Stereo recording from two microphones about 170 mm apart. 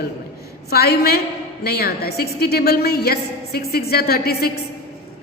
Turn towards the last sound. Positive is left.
turn(degrees=65)  # may be behind; listen again after turning